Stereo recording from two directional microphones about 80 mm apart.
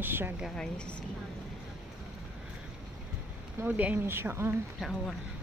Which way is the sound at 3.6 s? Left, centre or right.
Right.